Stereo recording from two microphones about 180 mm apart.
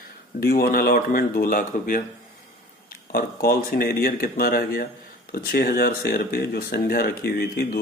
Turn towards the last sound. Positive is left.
turn(degrees=60)  # may be behind; listen again after turning